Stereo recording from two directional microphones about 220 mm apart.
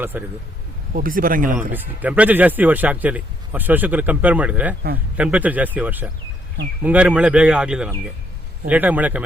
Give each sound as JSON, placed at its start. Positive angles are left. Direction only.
{"t": 0.0, "sound": "speech", "side_deg": -10}
{"t": 0.9, "sound": "speech", "side_deg": -40}
{"t": 1.7, "sound": "speech", "side_deg": -5}